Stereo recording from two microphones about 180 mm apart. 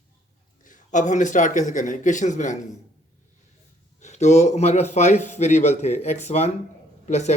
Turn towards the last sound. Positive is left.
turn(degrees=40)  # may be behind; listen again after turning